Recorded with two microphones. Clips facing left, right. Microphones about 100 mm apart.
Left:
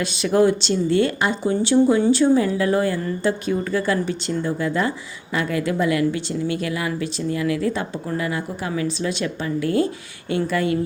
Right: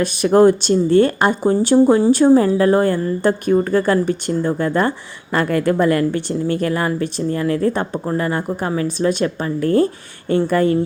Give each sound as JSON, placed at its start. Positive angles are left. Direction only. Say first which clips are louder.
{"t": 0.0, "sound": "speech", "louder": "right 6 dB", "side_deg": -50}